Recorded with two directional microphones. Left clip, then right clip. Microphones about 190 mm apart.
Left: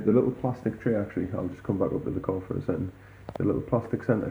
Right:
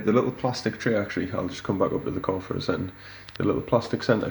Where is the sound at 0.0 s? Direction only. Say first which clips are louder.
Right 1 dB; 10° right (ahead or behind).